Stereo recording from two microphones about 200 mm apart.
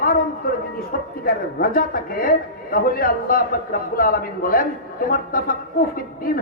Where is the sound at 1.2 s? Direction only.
45° left (ahead or behind).